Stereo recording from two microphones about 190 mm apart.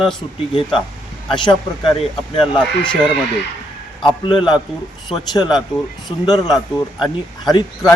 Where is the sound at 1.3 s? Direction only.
25° left (ahead or behind).